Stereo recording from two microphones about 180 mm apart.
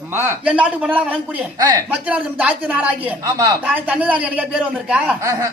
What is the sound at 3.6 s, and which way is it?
Speech, 5° right (ahead or behind).